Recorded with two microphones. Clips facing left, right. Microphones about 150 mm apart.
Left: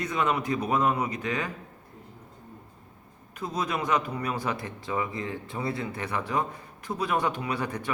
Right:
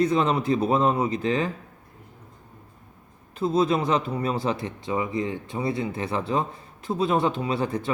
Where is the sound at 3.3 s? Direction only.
30° right (ahead or behind).